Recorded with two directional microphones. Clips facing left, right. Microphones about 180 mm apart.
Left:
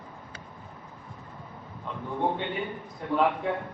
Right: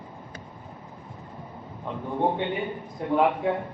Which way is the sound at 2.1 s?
15° right (ahead or behind).